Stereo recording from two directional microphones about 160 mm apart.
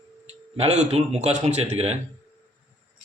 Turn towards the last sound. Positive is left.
turn(degrees=-40)  # may be behind; listen again after turning